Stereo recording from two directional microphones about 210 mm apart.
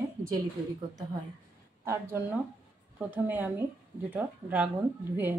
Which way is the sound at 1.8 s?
10° right (ahead or behind).